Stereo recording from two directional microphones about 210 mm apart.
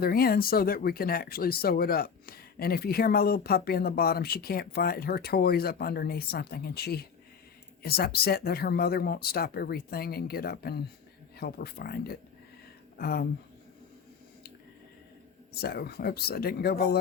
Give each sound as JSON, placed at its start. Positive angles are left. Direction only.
{"t": 0.0, "sound": "speech", "side_deg": 45}
{"t": 15.5, "sound": "speech", "side_deg": 50}